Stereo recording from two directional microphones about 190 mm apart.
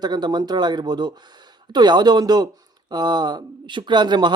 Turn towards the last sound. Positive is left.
turn(degrees=-25)  # may be behind; listen again after turning